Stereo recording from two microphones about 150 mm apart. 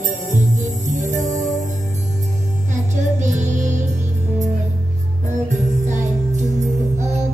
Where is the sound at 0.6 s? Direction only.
50° right (ahead or behind).